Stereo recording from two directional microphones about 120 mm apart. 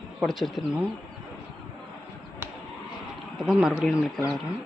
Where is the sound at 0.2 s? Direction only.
Centre (ahead or behind).